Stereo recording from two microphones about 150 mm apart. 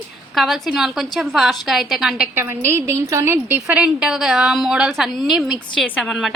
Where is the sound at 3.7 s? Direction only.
5° right (ahead or behind).